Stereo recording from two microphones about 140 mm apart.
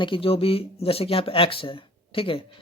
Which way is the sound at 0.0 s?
40° left (ahead or behind).